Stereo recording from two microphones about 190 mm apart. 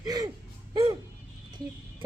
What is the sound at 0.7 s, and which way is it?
Music, 20° right (ahead or behind).